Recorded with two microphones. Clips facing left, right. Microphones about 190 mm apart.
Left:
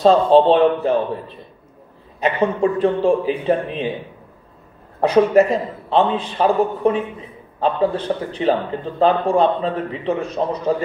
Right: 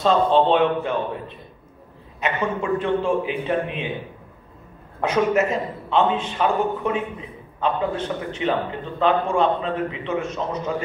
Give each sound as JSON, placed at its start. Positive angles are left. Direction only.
{"t": 0.0, "sound": "a man's voice", "side_deg": 35}
{"t": 2.1, "sound": "a man's voice", "side_deg": 35}
{"t": 5.0, "sound": "a man's voice", "side_deg": 35}